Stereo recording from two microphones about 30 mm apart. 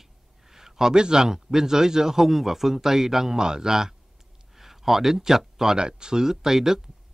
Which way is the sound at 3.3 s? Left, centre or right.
Right.